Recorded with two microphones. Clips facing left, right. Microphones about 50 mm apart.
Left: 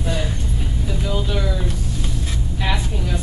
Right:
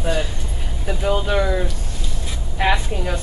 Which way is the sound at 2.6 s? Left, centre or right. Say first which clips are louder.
Right 6 dB; right.